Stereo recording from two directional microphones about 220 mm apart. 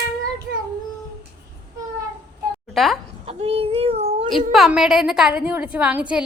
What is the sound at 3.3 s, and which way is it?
A child's voice, 25° right (ahead or behind).